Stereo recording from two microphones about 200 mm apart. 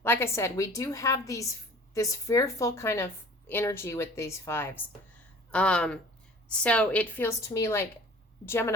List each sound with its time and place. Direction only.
0.0 s a woman's voice: 10° left (ahead or behind)